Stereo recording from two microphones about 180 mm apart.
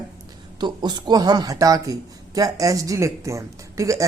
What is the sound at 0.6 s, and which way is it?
Speech, 25° right (ahead or behind).